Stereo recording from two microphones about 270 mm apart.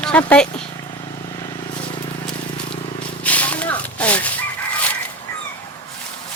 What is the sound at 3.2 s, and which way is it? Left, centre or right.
Chicken, centre.